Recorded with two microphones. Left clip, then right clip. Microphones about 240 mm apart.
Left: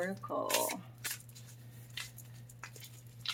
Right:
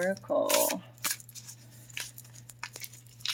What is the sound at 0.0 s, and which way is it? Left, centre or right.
Speech, right.